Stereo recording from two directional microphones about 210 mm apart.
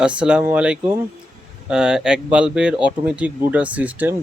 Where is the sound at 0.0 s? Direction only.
5° right (ahead or behind).